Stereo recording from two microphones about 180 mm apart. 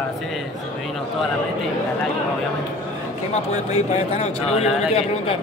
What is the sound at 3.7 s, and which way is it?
Speech, 35° left (ahead or behind).